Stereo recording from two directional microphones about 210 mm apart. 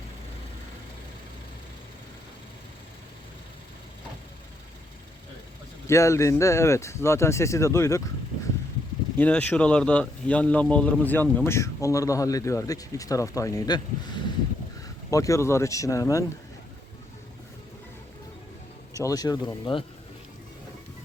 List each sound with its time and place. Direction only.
5.9 s a man's voice: 15° left (ahead or behind)
9.1 s a man's voice: 5° left (ahead or behind)
18.9 s a man's voice: 15° left (ahead or behind)